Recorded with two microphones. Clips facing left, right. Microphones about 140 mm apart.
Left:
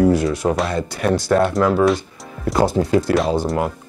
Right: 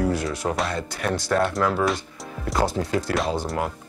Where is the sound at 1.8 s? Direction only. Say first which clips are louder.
Left 7 dB; centre (ahead or behind).